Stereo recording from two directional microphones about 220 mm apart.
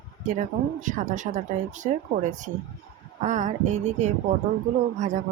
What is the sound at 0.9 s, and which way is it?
Speech, 35° right (ahead or behind).